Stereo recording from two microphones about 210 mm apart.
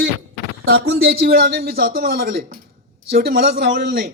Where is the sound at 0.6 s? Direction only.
70° right (ahead or behind).